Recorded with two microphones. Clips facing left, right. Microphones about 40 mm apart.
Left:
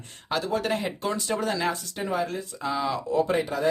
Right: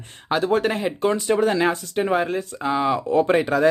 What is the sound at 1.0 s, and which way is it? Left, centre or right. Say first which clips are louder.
Speech: right 8 dB; right.